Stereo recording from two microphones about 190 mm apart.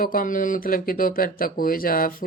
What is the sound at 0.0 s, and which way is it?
Speech, 45° left (ahead or behind).